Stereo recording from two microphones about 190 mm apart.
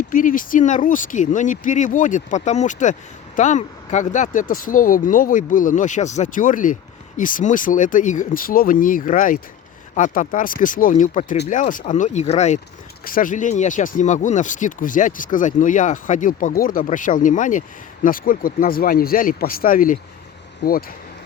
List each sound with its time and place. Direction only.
0.1 s speech: 45° left (ahead or behind)
13.1 s speech: 45° left (ahead or behind)
20.6 s speech: 60° left (ahead or behind)